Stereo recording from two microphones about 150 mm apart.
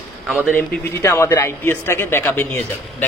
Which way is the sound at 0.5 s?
15° left (ahead or behind).